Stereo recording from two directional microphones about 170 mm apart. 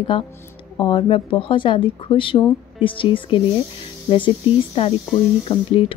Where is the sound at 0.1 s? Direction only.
30° left (ahead or behind).